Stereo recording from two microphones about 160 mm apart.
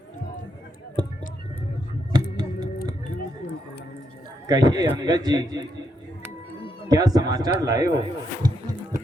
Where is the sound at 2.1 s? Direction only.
25° right (ahead or behind).